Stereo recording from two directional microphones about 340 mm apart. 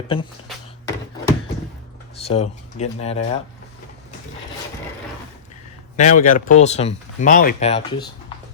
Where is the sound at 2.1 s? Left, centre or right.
Centre.